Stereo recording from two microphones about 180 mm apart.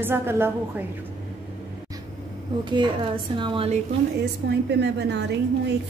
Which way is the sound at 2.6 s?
25° right (ahead or behind).